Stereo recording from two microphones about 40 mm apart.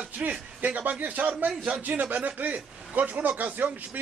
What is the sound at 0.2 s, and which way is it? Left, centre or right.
Speech, right.